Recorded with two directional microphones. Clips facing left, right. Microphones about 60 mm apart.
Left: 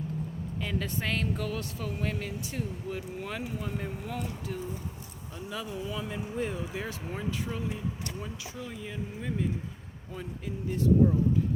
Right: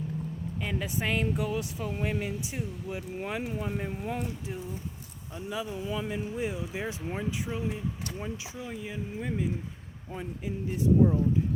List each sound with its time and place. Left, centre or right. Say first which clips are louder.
0.6 s speech: right 1 dB; centre
5.5 s speech: right 3 dB; centre
6.7 s speech: right 2 dB; centre